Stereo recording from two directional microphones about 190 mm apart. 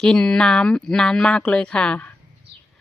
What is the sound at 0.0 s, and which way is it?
Speech, 5° left (ahead or behind).